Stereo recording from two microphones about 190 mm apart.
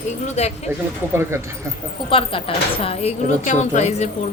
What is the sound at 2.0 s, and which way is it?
Speech, 30° left (ahead or behind).